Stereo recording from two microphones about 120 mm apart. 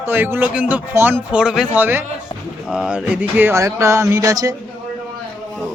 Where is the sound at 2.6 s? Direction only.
5° right (ahead or behind); by 4.5 s 30° right (ahead or behind).